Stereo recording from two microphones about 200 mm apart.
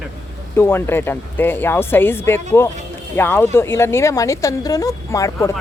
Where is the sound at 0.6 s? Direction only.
10° left (ahead or behind).